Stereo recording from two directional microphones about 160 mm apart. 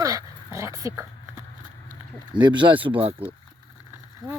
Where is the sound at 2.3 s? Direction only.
30° right (ahead or behind).